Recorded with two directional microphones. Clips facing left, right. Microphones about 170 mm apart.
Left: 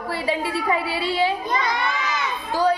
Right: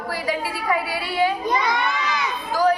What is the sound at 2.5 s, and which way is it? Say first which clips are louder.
Speech: right 1 dB; 30° left (ahead or behind).